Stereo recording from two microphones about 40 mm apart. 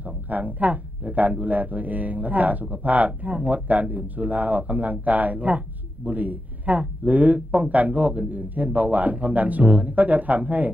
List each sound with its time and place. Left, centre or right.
0.3 s speech: right